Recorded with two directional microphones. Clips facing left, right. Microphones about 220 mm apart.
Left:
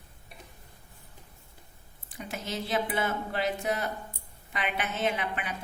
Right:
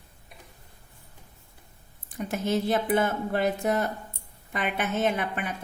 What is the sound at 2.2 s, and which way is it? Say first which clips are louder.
A woman's voice: right 9 dB; 50° right (ahead or behind).